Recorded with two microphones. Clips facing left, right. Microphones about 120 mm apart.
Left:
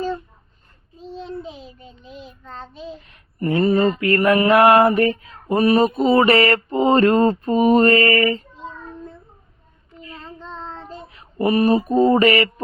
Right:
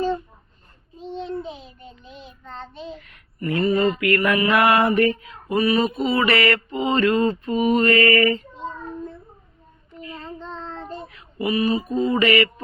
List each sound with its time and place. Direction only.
0.9 s child singing: centre (ahead or behind)
3.3 s mantra: 35° left (ahead or behind)
10.2 s child singing: centre (ahead or behind)
11.3 s mantra: 45° left (ahead or behind)